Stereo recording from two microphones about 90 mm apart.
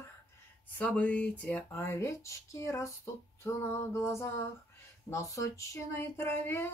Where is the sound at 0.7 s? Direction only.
15° left (ahead or behind); by 2.9 s 35° left (ahead or behind).